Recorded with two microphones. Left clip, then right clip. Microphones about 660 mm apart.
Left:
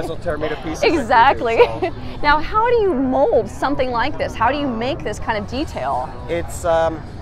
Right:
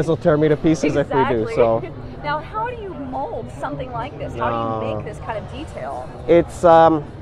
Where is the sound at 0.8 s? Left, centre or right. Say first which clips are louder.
Left 5 dB; left.